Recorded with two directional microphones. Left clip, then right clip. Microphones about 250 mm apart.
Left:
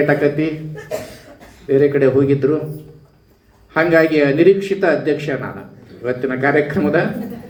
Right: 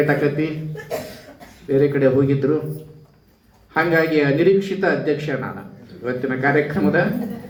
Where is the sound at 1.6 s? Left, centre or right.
Left.